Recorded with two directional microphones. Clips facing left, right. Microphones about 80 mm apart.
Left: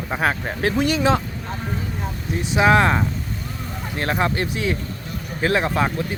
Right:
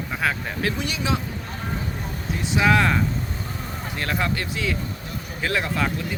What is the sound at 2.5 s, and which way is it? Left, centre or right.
Speech, left.